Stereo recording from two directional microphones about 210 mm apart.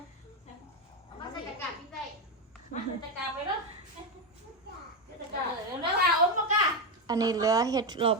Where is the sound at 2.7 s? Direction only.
40° left (ahead or behind).